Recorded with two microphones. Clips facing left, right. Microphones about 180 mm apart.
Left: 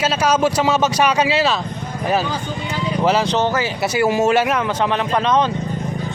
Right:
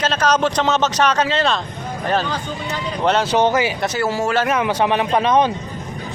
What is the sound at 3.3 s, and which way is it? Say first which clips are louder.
Speech: right 2 dB; 15° right (ahead or behind).